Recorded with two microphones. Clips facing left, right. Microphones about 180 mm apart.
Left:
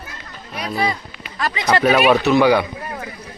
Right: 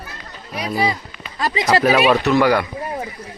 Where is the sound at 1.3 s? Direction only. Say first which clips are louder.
Right 2 dB; 30° right (ahead or behind).